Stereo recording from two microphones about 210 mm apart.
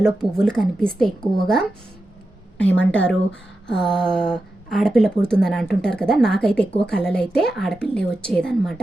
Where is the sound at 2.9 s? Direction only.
5° left (ahead or behind).